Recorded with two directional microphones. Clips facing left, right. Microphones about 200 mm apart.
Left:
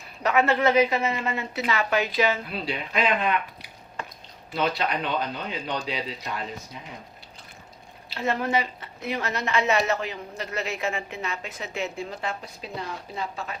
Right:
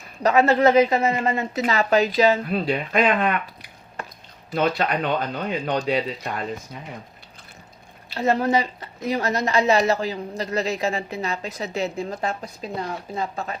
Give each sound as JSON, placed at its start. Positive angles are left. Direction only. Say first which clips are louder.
{"t": 0.2, "sound": "a woman's voice", "louder": "right 5 dB", "side_deg": -40}
{"t": 4.5, "sound": "a woman's voice", "louder": "right 4 dB", "side_deg": -50}
{"t": 8.1, "sound": "a woman's voice", "louder": "right 5 dB", "side_deg": -40}